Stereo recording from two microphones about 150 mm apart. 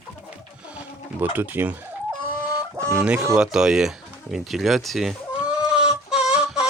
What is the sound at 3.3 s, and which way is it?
Speech, 5° right (ahead or behind).